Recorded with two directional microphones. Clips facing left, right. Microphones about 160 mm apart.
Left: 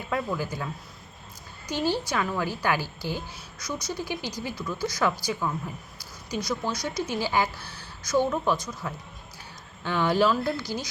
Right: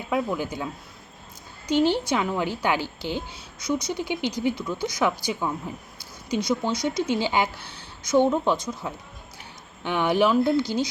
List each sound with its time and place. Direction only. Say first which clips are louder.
0.1 s a woman's voice: right 3 dB; 15° right (ahead or behind)